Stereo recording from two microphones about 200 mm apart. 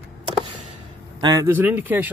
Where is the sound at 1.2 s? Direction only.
20° right (ahead or behind).